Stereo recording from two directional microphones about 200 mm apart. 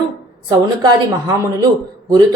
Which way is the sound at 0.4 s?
20° right (ahead or behind).